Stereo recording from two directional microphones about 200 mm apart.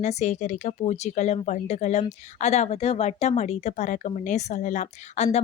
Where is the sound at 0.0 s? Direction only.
35° left (ahead or behind).